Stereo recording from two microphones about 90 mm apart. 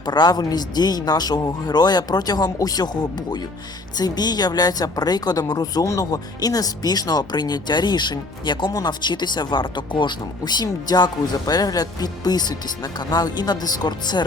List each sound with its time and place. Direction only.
0.0 s speech: 50° left (ahead or behind)